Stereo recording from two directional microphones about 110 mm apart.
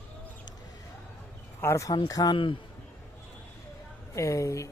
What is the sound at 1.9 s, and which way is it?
Speech, 40° left (ahead or behind).